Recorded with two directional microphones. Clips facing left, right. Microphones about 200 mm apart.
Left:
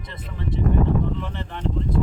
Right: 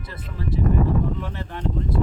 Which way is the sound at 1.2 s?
5° right (ahead or behind).